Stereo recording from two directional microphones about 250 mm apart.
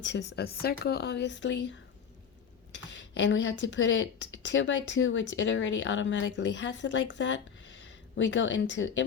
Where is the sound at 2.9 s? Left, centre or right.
Left.